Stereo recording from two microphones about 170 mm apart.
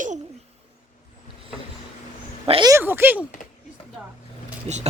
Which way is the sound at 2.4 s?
25° right (ahead or behind).